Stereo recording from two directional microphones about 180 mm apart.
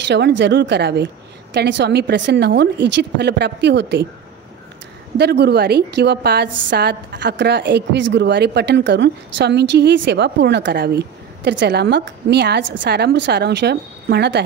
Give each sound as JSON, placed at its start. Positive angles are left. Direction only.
{"t": 0.0, "sound": "a woman's voice", "side_deg": -70}
{"t": 5.1, "sound": "a woman's voice", "side_deg": -65}